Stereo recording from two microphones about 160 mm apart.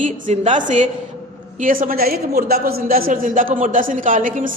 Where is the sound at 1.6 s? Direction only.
60° right (ahead or behind).